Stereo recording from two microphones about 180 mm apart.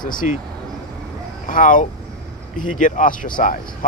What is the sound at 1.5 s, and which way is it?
Speech, 45° left (ahead or behind).